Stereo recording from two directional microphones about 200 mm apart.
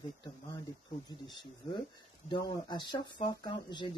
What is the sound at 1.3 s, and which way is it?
Speech, 25° left (ahead or behind).